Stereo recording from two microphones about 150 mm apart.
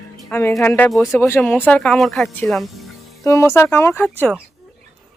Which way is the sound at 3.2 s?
20° left (ahead or behind).